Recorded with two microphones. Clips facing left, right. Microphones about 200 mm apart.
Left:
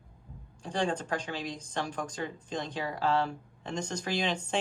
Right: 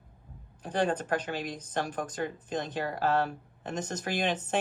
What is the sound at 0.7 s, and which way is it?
Speech, 60° right (ahead or behind).